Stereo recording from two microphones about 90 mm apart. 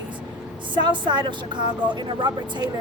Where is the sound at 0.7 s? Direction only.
60° right (ahead or behind).